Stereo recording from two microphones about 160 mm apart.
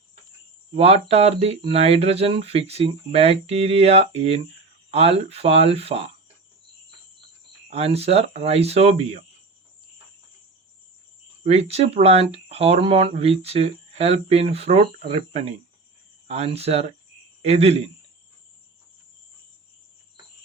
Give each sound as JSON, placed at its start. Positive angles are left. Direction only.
{"t": 0.8, "sound": "speech", "side_deg": -40}
{"t": 7.7, "sound": "speech", "side_deg": -40}
{"t": 11.4, "sound": "speech", "side_deg": -40}